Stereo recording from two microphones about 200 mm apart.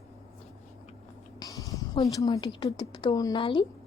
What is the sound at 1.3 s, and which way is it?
Speech, 15° left (ahead or behind).